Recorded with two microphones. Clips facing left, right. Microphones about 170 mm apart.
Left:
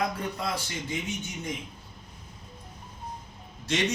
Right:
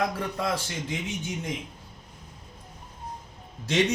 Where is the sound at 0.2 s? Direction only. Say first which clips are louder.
Right 3 dB; 85° right.